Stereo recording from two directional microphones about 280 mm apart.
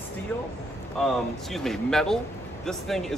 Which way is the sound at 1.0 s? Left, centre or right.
Centre.